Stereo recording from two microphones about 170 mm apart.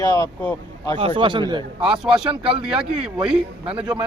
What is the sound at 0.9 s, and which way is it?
Speech, 30° right (ahead or behind).